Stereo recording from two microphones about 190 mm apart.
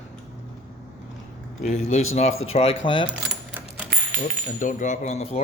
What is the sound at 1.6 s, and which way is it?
Speech, 35° left (ahead or behind).